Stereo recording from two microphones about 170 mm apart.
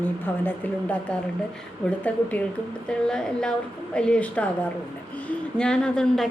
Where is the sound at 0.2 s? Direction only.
10° left (ahead or behind).